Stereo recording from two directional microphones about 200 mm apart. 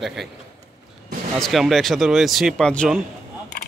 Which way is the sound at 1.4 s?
Centre (ahead or behind).